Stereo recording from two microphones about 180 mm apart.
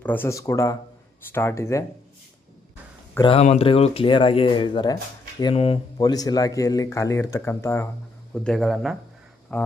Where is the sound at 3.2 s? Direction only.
30° left (ahead or behind).